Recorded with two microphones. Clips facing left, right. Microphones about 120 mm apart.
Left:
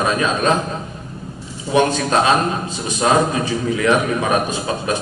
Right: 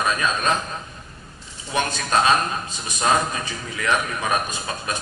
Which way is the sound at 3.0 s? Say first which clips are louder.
Left 5 dB; 15° left (ahead or behind).